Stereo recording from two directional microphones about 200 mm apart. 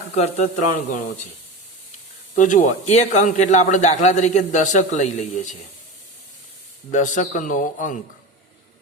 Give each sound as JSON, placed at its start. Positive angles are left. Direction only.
{"t": 0.2, "sound": "a man's voice", "side_deg": 35}
{"t": 2.3, "sound": "a man's voice", "side_deg": 40}
{"t": 6.9, "sound": "a man's voice", "side_deg": 40}